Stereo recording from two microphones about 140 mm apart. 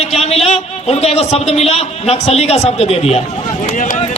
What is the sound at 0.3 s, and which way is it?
A man's voice, 50° left (ahead or behind).